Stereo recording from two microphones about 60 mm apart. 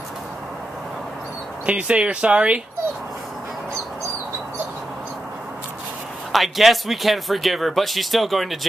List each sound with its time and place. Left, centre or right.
1.7 s speech: right
6.3 s speech: centre